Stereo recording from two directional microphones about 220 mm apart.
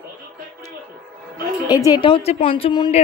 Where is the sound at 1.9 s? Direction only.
20° left (ahead or behind).